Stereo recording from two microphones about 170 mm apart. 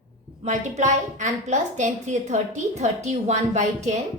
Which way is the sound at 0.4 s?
45° right (ahead or behind).